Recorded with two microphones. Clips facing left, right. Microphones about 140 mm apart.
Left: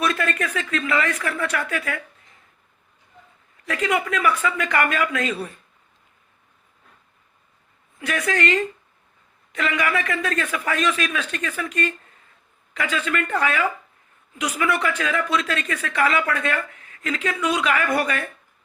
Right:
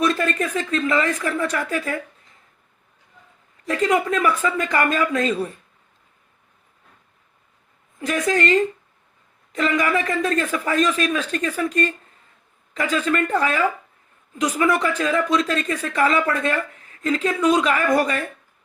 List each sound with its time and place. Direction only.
0.1 s speech: 35° right (ahead or behind)
3.7 s speech: 40° right (ahead or behind)
7.9 s a woman's voice: 35° right (ahead or behind)